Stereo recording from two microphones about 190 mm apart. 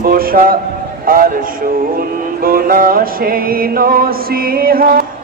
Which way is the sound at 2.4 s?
50° right (ahead or behind).